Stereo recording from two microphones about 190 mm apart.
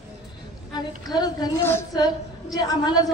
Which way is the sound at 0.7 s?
20° left (ahead or behind).